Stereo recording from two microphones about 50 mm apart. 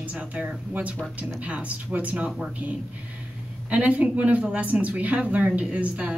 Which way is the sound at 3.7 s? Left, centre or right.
Right.